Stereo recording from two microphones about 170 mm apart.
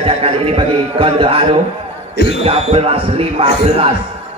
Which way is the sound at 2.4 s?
35° right (ahead or behind).